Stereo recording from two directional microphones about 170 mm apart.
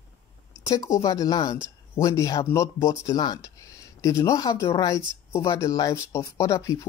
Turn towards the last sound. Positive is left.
turn(degrees=20)  # may be behind; listen again after turning